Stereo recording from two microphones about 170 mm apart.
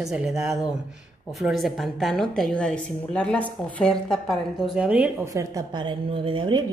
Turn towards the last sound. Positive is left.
turn(degrees=-30)  # may be behind; listen again after turning